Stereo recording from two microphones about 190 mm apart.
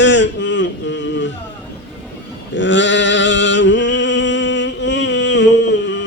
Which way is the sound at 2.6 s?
70° left (ahead or behind).